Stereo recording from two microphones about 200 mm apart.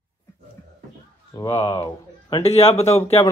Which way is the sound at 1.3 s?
20° left (ahead or behind).